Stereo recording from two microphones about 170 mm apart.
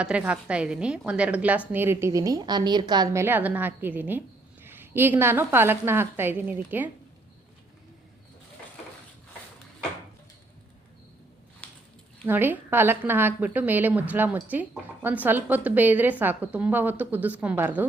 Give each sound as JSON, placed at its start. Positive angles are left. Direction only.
{"t": 0.0, "sound": "a woman's voice", "side_deg": -5}
{"t": 11.6, "sound": "a sound", "side_deg": 5}
{"t": 12.2, "sound": "a woman's voice", "side_deg": -10}